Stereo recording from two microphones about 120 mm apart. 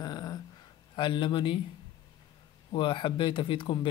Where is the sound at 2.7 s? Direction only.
45° left (ahead or behind).